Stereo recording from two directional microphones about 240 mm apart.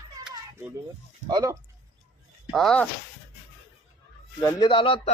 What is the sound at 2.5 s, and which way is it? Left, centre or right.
Speech, centre.